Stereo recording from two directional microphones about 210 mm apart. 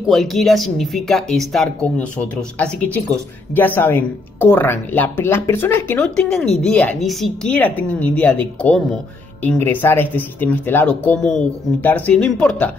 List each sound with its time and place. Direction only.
0.0 s speech: centre (ahead or behind)
3.5 s speech: 10° left (ahead or behind)